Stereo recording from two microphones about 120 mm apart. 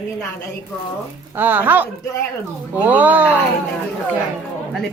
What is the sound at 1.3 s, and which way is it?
A woman's voice, 15° right (ahead or behind).